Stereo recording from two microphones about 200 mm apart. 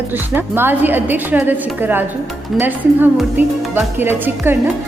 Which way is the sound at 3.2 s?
10° right (ahead or behind).